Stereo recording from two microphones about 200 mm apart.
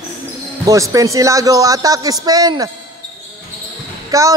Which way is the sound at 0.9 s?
15° right (ahead or behind).